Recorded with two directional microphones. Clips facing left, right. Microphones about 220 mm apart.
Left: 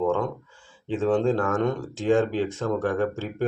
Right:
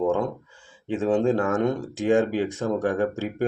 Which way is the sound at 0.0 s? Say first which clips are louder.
Right 1 dB; 15° right (ahead or behind).